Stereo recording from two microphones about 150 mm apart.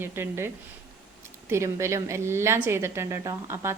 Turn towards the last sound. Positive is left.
turn(degrees=-20)  # may be behind; listen again after turning